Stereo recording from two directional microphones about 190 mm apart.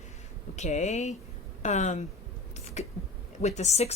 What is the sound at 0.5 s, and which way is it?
Speech, 35° left (ahead or behind).